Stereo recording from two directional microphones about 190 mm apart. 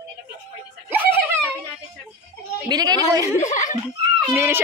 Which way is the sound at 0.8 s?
10° right (ahead or behind).